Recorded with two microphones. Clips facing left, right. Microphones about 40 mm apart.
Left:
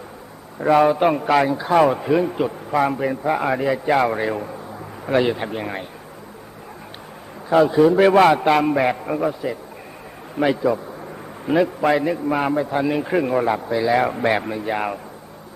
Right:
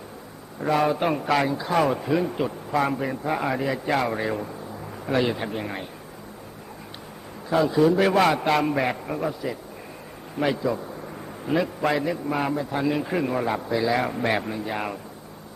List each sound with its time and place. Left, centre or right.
0.6 s a man's voice: centre
7.5 s a man's voice: left
8.3 s a man's voice: centre